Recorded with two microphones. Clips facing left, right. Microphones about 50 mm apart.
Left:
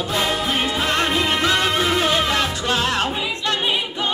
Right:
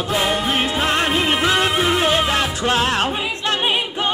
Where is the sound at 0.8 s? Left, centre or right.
Centre; by 3.0 s right.